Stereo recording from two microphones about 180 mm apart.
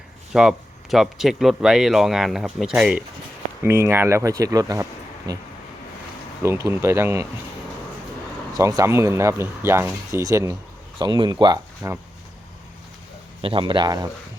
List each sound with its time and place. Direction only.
0.3 s speech: centre (ahead or behind)
3.6 s speech: 15° right (ahead or behind)
8.5 s speech: 20° right (ahead or behind)
13.4 s speech: 30° right (ahead or behind)